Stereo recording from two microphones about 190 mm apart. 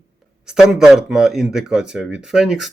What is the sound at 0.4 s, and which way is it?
Speech, 5° right (ahead or behind).